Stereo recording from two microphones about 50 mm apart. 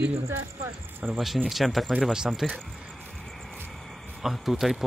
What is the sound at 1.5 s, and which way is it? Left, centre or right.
Speech, centre.